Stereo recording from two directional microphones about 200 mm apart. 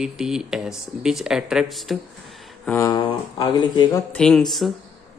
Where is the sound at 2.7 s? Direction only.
15° left (ahead or behind).